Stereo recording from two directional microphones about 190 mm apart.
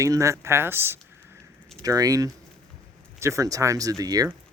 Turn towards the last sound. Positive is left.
turn(degrees=-20)  # may be behind; listen again after turning